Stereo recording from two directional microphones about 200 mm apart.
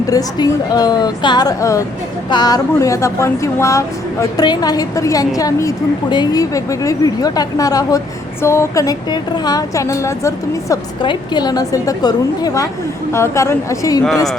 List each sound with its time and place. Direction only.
0.1 s a woman's voice: 20° left (ahead or behind)